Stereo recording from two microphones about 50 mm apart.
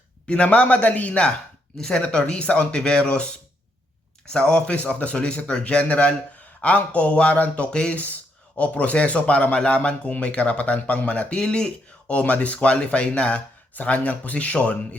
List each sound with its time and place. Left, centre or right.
0.3 s speech: left
1.8 s speech: centre
11.3 s speech: centre
12.1 s speech: left